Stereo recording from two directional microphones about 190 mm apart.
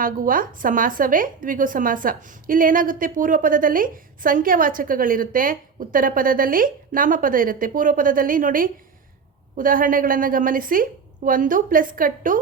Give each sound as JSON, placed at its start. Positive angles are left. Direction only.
{"t": 0.0, "sound": "a woman's voice", "side_deg": -45}